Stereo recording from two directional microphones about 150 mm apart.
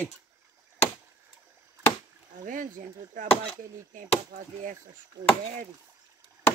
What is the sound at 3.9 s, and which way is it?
Speech, 60° right (ahead or behind).